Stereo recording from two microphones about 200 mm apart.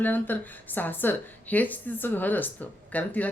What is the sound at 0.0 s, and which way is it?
A woman's voice, 10° left (ahead or behind).